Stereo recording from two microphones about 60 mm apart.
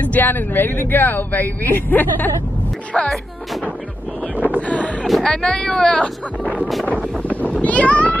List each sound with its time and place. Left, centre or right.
0.0 s speech: left
2.9 s speech: centre
4.6 s wind noise: left
5.2 s speech: centre
7.4 s a sound: left